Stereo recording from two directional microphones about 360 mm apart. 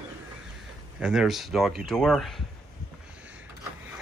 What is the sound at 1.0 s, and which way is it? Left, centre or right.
Speech, centre.